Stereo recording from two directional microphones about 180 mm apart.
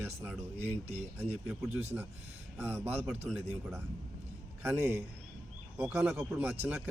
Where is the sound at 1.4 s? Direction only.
10° right (ahead or behind).